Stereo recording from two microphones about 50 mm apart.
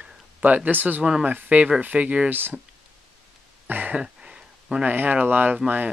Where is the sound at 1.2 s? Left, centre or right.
Right.